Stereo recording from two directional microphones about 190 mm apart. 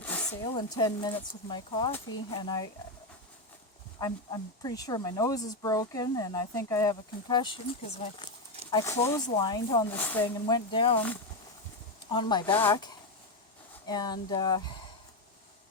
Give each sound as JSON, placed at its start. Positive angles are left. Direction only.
{"t": 0.0, "sound": "a sound", "side_deg": 10}
{"t": 0.4, "sound": "speech", "side_deg": 20}
{"t": 4.0, "sound": "speech", "side_deg": 20}
{"t": 8.7, "sound": "speech", "side_deg": 15}
{"t": 9.9, "sound": "speech", "side_deg": 10}
{"t": 10.4, "sound": "speech", "side_deg": 25}
{"t": 12.1, "sound": "speech", "side_deg": 25}